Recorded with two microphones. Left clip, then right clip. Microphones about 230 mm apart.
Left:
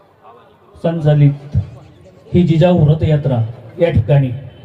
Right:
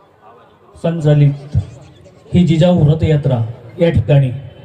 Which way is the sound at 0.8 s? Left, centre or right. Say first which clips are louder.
Even; right.